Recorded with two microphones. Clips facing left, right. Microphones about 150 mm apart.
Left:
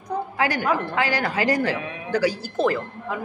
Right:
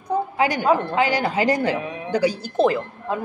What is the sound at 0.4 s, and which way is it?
A woman's voice, 20° right (ahead or behind).